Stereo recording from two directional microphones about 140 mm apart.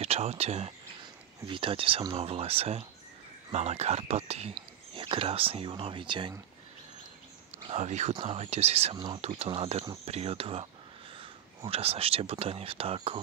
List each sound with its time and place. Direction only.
0.0 s speech: 45° right (ahead or behind)
1.4 s speech: 35° right (ahead or behind)
4.6 s speech: 35° right (ahead or behind)
7.6 s speech: 55° right (ahead or behind)
8.1 s speech: 40° right (ahead or behind)
8.9 s speech: 30° right (ahead or behind)
9.2 s speech: 50° right (ahead or behind)